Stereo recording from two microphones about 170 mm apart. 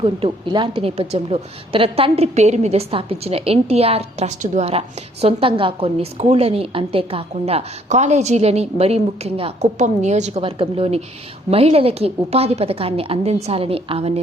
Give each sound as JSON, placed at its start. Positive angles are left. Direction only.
{"t": 0.0, "sound": "a woman's voice", "side_deg": -30}